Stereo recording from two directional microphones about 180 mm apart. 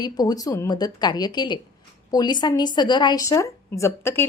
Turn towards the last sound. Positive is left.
turn(degrees=15)  # may be behind; listen again after turning